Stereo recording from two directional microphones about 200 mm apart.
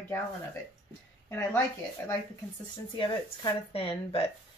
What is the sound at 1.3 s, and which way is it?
Speech, 15° left (ahead or behind).